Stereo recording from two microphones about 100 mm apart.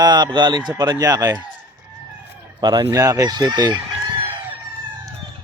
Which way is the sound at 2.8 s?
35° right (ahead or behind).